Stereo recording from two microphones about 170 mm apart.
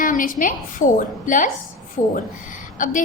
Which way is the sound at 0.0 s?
55° left (ahead or behind).